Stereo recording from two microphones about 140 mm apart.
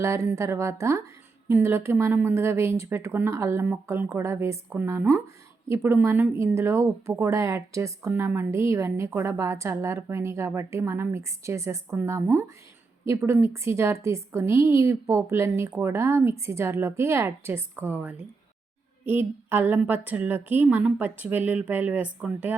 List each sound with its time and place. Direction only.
0.0 s a woman's voice: 20° right (ahead or behind)